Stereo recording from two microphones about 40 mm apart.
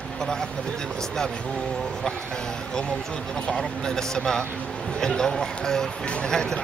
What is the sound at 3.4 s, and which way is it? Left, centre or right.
Speech, centre.